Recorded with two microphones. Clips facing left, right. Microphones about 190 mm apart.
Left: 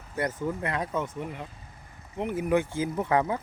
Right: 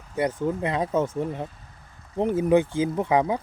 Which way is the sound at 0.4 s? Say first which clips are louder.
Right 5 dB; 25° right (ahead or behind).